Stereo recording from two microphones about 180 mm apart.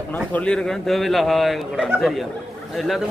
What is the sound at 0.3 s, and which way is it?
A man's voice, 5° left (ahead or behind).